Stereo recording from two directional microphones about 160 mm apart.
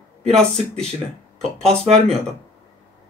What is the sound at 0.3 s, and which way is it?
A man's voice, 5° left (ahead or behind).